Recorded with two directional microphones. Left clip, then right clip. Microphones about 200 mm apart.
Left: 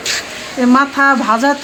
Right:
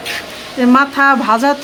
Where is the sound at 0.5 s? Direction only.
10° right (ahead or behind).